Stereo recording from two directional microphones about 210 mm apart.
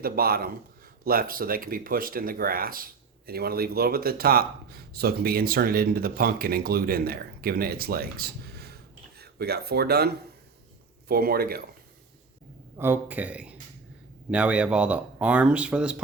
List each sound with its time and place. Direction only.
0.0 s speech: 45° right (ahead or behind)
12.7 s speech: 10° right (ahead or behind)